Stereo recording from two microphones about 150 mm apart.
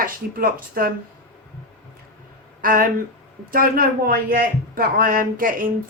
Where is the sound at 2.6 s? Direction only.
70° right (ahead or behind).